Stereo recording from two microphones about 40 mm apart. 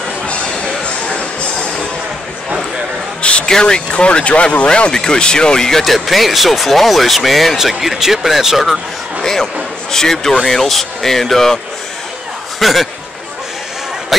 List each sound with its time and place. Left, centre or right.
0.7 s a sound: centre
3.2 s a sound: left
3.4 s speech: centre
3.9 s speech: left; by 5.9 s centre
5.9 s speech: centre
9.2 s a man's voice: centre